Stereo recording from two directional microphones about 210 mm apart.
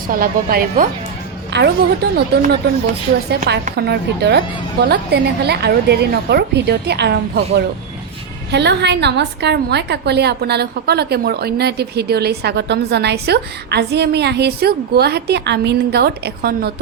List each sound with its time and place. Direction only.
0.1 s a woman's voice: 40° right (ahead or behind)